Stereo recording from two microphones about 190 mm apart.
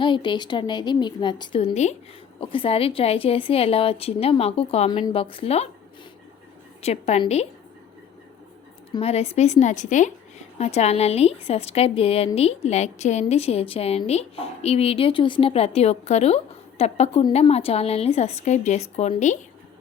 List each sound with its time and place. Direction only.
0.0 s a woman's voice: 25° left (ahead or behind)
6.8 s a woman's voice: 35° left (ahead or behind)
8.9 s a woman's voice: 30° left (ahead or behind)